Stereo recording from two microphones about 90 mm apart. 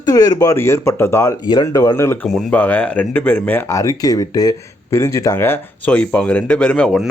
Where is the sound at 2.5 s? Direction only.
20° left (ahead or behind).